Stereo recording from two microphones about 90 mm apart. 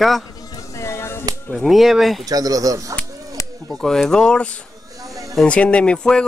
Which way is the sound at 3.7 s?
5° left (ahead or behind).